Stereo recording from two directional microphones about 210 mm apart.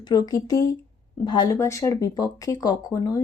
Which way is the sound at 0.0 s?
20° left (ahead or behind).